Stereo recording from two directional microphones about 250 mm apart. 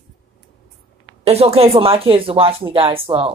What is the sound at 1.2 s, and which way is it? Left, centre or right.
Speech, right.